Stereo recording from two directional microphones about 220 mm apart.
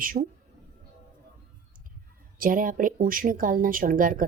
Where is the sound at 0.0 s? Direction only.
40° right (ahead or behind).